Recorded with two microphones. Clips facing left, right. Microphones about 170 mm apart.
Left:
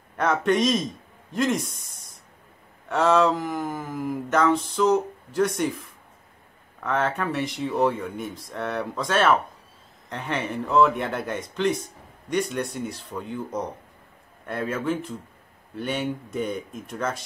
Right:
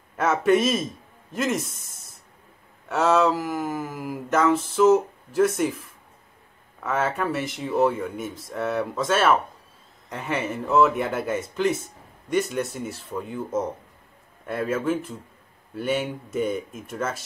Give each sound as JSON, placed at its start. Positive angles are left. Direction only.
{"t": 0.1, "sound": "speech", "side_deg": -5}
{"t": 2.9, "sound": "speech", "side_deg": 0}